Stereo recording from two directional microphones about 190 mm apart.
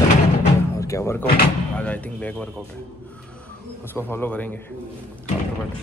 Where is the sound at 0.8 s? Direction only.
15° left (ahead or behind).